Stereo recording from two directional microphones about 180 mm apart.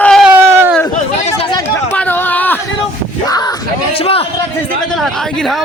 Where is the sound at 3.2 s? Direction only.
20° left (ahead or behind).